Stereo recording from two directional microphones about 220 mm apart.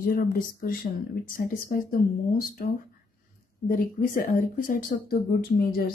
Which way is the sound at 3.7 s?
40° left (ahead or behind).